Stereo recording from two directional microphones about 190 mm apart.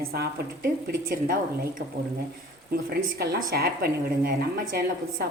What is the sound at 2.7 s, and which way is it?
Speech, 50° right (ahead or behind).